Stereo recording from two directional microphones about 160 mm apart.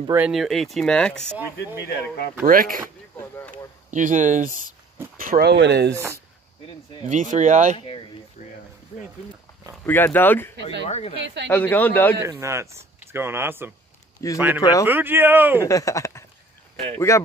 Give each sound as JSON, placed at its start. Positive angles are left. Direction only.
{"t": 0.3, "sound": "speech", "side_deg": 0}
{"t": 1.6, "sound": "speech", "side_deg": 85}
{"t": 2.4, "sound": "speech", "side_deg": -60}
{"t": 3.2, "sound": "a sound", "side_deg": 15}
{"t": 3.9, "sound": "speech", "side_deg": -50}
{"t": 7.1, "sound": "speech", "side_deg": -50}
{"t": 8.4, "sound": "a sound", "side_deg": 50}
{"t": 9.8, "sound": "speech", "side_deg": 10}
{"t": 10.9, "sound": "speech", "side_deg": 40}
{"t": 11.4, "sound": "speech", "side_deg": 10}
{"t": 12.2, "sound": "speech", "side_deg": -20}
{"t": 14.2, "sound": "speech", "side_deg": 20}
{"t": 14.9, "sound": "speech", "side_deg": -10}
{"t": 15.6, "sound": "speech", "side_deg": 20}